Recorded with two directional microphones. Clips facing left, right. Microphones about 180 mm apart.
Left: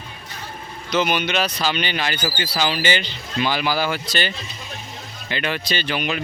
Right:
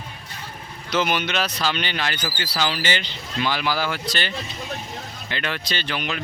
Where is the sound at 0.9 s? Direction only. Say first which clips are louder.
Left 2 dB; 5° right (ahead or behind); by 4.0 s 10° left (ahead or behind).